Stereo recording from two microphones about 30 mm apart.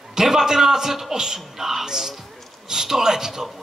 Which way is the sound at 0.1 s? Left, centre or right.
Centre.